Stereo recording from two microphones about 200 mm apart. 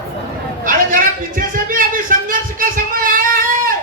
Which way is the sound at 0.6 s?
45° right (ahead or behind).